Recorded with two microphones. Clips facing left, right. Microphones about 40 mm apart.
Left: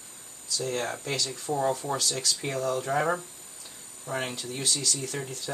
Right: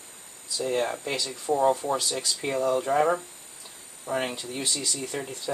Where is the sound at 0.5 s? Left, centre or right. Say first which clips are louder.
Right 4 dB; centre.